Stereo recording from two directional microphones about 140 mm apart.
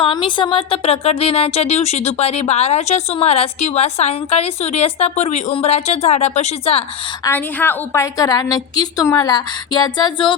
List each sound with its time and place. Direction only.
0.0 s speech: 35° left (ahead or behind)
7.3 s a woman's voice: 15° left (ahead or behind); by 10.3 s 35° left (ahead or behind)